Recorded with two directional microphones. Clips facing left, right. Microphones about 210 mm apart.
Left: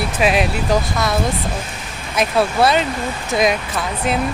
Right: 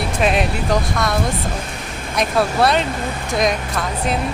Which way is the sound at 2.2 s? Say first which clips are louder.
Left 1 dB; centre (ahead or behind).